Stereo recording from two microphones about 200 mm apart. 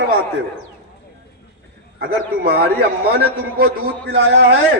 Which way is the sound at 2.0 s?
50° right (ahead or behind).